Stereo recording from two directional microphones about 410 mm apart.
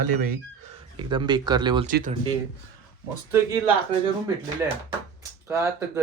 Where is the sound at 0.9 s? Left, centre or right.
Centre.